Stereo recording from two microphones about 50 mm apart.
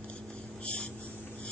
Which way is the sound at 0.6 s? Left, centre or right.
Left.